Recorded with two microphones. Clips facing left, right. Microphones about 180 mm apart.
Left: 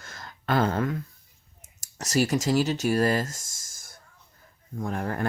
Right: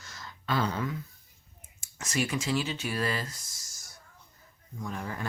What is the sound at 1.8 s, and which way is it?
Speech, 40° left (ahead or behind).